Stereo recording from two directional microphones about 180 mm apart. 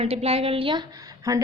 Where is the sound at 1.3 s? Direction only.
20° right (ahead or behind).